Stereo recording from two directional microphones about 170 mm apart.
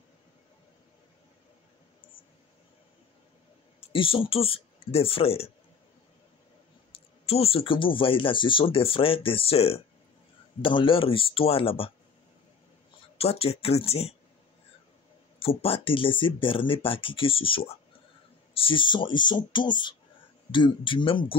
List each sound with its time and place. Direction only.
3.8 s speech: 30° left (ahead or behind)
6.9 s speech: 35° left (ahead or behind)
13.2 s speech: 35° left (ahead or behind)
15.3 s speech: 35° left (ahead or behind)